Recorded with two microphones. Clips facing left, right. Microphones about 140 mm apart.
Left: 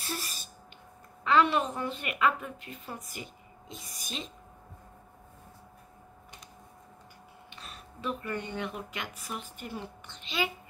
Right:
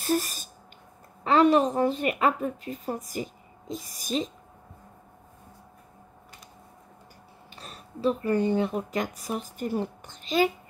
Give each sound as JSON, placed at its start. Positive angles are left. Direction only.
{"t": 0.0, "sound": "a sound", "side_deg": -45}
{"t": 1.2, "sound": "a woman's voice", "side_deg": -40}
{"t": 7.5, "sound": "a woman's voice", "side_deg": -40}